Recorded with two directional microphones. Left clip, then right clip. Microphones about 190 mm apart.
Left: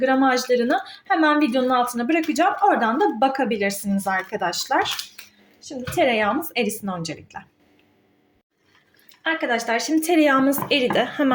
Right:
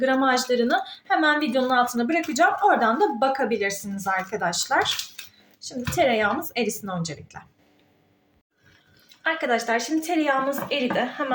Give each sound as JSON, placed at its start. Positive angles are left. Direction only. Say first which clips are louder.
{"t": 0.0, "sound": "a woman's voice", "louder": "left 2 dB", "side_deg": 10}
{"t": 9.2, "sound": "a woman's voice", "louder": "left 1 dB", "side_deg": 5}
{"t": 10.0, "sound": "a woman's voice", "louder": "left 5 dB", "side_deg": 30}
{"t": 10.7, "sound": "a woman's voice", "louder": "left 5 dB", "side_deg": 45}